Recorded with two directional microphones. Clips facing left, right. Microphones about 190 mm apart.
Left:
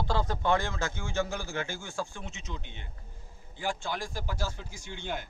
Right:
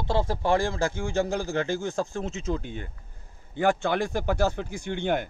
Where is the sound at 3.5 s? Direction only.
60° right (ahead or behind).